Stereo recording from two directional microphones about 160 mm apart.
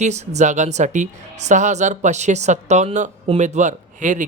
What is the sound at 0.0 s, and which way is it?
A man's voice, 45° right (ahead or behind).